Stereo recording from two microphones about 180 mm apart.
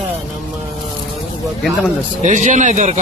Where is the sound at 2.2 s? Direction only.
45° right (ahead or behind).